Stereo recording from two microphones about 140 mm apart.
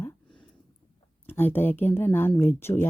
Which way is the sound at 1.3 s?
15° left (ahead or behind).